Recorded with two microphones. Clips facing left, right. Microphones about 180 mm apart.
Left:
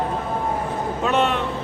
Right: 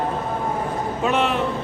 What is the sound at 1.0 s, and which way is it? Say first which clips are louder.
Speech: even; centre (ahead or behind).